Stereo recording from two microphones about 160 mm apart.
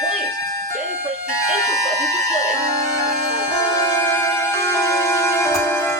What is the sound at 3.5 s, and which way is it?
Music, 20° left (ahead or behind).